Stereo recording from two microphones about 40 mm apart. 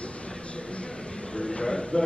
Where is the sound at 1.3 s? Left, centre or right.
Left.